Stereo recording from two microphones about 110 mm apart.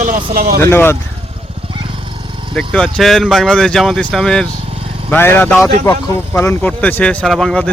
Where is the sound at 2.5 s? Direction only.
5° left (ahead or behind).